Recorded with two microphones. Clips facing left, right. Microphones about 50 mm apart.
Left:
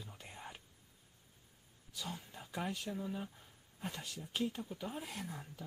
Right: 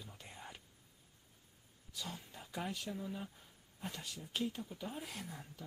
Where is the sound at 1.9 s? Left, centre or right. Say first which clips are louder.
Left 1 dB; centre.